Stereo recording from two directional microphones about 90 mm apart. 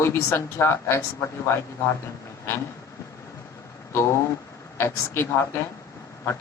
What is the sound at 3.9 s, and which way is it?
Speech, 30° left (ahead or behind).